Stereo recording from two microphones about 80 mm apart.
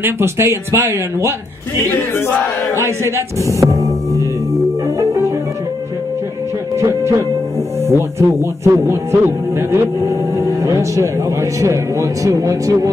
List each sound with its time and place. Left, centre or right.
0.0 s music: right
1.9 s battle cry: left
2.8 s speech: right
4.8 s music: right
6.8 s speech: right
7.8 s music: right